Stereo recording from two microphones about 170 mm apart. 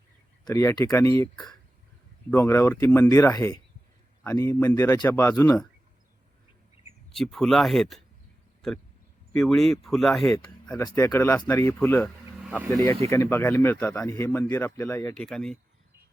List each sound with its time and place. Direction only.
0.4 s speech: 20° left (ahead or behind)
2.3 s speech: 15° left (ahead or behind)
7.1 s speech: centre (ahead or behind)
9.3 s speech: 5° left (ahead or behind)
10.8 s speech: 20° left (ahead or behind)
15.1 s speech: 5° left (ahead or behind)